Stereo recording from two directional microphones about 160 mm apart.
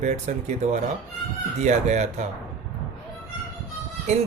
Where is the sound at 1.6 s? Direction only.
45° right (ahead or behind).